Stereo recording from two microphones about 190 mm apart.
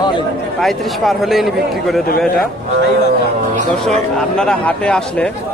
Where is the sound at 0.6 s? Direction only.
Centre (ahead or behind).